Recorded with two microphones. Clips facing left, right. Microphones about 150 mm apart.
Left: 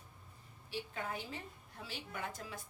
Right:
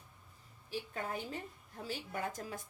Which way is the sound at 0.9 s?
45° right (ahead or behind).